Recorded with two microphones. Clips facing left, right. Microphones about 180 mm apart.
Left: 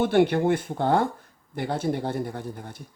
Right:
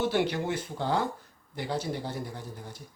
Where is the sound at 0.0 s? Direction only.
55° left (ahead or behind).